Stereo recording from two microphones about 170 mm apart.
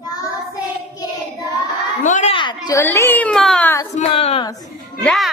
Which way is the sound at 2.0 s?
45° left (ahead or behind).